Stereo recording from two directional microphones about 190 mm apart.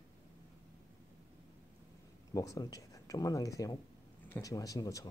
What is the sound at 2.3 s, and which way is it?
Speech, 15° left (ahead or behind).